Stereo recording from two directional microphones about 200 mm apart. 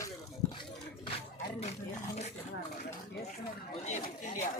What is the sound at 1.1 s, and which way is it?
Music, 30° left (ahead or behind).